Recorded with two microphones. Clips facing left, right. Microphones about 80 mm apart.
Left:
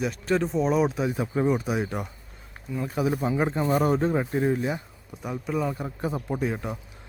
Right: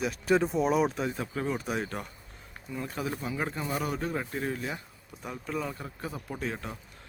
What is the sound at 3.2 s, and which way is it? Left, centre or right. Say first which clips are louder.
Speech: left 8 dB; left.